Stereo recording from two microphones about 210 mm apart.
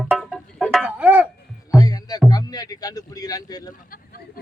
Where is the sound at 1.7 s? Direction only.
15° left (ahead or behind).